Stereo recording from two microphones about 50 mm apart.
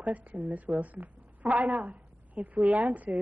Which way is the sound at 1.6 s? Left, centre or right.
Right.